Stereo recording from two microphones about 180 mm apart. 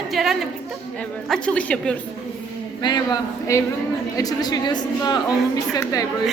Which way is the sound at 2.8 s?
20° left (ahead or behind).